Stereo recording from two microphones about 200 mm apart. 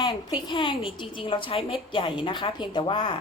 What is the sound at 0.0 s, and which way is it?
A woman's voice, 20° left (ahead or behind).